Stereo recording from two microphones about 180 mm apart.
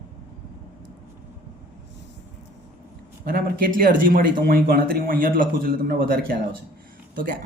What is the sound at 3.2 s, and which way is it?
A man's voice, 55° right (ahead or behind).